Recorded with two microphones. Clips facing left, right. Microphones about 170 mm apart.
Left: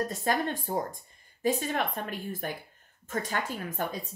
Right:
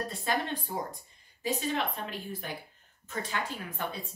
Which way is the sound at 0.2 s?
45° left (ahead or behind).